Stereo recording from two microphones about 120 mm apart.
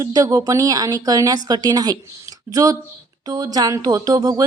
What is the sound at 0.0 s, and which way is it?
Speech, 30° right (ahead or behind).